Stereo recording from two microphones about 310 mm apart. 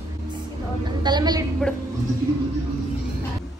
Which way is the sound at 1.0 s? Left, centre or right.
Centre.